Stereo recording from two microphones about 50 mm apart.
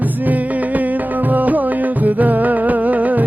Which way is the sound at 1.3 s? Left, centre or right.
Right.